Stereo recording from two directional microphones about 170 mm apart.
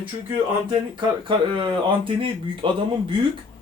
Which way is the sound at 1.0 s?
30° right (ahead or behind).